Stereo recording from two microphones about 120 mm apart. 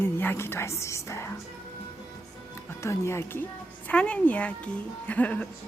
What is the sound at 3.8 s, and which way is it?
Speech, 10° left (ahead or behind).